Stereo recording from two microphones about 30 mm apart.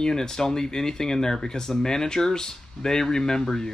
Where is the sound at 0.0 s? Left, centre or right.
Left.